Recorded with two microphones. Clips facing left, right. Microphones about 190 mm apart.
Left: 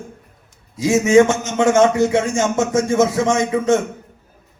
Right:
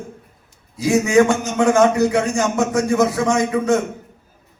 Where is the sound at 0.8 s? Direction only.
25° left (ahead or behind).